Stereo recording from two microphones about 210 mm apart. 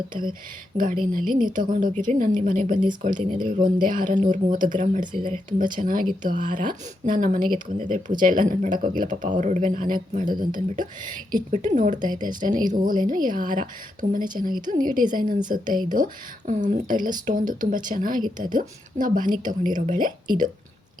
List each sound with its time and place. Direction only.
0.8 s speech: 40° right (ahead or behind)
5.1 s speech: 25° right (ahead or behind)
5.7 s speech: 40° right (ahead or behind)